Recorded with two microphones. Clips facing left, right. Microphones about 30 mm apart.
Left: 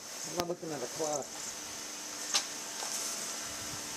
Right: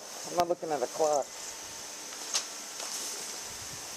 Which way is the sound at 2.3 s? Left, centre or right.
Left.